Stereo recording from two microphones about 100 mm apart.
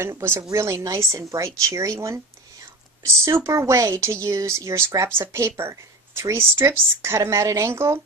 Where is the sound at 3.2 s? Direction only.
30° right (ahead or behind).